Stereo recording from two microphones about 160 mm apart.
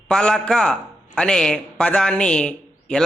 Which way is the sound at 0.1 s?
5° left (ahead or behind).